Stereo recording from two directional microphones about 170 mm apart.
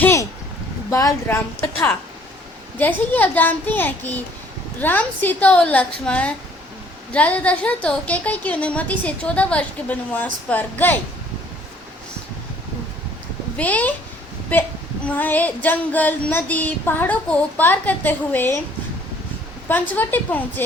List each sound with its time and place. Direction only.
0.0 s a sound: 15° left (ahead or behind)
0.9 s a woman's voice: 20° left (ahead or behind)
13.6 s a woman's voice: 10° left (ahead or behind)
19.6 s a woman's voice: 10° left (ahead or behind)